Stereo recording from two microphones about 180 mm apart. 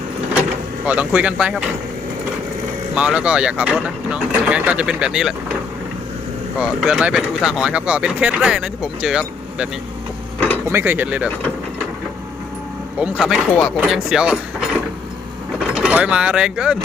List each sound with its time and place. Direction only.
0.9 s speech: 10° right (ahead or behind)
2.9 s speech: 5° right (ahead or behind)
6.6 s speech: 5° right (ahead or behind)
10.7 s speech: 10° right (ahead or behind)
13.0 s speech: centre (ahead or behind)
13.7 s mechanisms: 5° right (ahead or behind)
15.7 s speech: 5° right (ahead or behind)